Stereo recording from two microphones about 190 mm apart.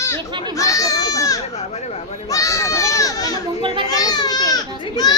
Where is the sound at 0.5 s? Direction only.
15° left (ahead or behind).